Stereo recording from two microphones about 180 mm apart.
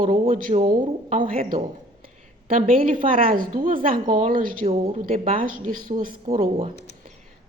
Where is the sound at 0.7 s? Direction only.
50° right (ahead or behind).